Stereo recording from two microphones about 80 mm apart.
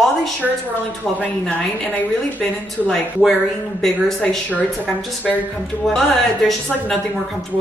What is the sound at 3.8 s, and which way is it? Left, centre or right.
Speech, centre.